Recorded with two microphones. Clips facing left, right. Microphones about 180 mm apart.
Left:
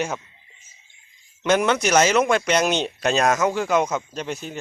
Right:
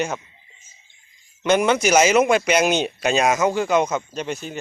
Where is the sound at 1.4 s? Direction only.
Centre (ahead or behind).